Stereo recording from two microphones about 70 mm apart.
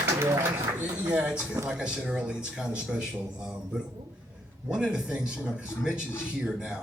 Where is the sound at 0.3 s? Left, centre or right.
Right.